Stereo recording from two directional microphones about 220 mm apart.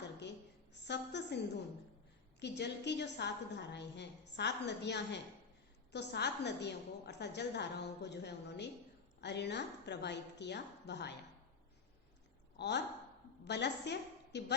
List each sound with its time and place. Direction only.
0.7 s a woman's voice: 50° left (ahead or behind)
2.4 s a woman's voice: 50° left (ahead or behind)
12.5 s a woman's voice: 50° left (ahead or behind)